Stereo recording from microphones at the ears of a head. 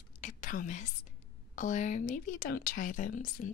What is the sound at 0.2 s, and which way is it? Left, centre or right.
Whispering, left.